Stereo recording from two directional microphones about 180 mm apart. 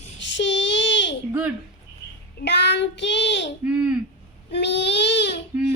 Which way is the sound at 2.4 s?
70° left (ahead or behind).